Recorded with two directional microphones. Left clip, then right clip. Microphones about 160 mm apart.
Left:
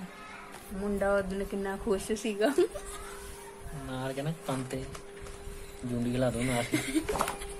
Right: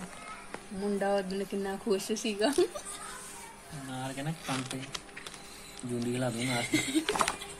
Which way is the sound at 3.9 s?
55° left (ahead or behind).